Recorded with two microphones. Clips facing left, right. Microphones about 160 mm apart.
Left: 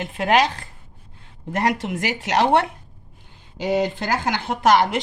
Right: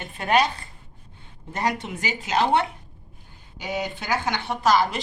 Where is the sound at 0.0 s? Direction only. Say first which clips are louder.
Left 3 dB; 90° left.